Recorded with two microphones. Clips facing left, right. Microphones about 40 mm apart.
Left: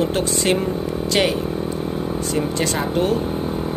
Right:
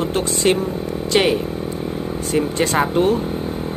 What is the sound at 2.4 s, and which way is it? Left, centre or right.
Speech, right.